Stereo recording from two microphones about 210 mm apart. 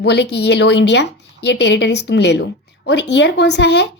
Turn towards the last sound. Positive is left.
turn(degrees=55)  # may be behind; listen again after turning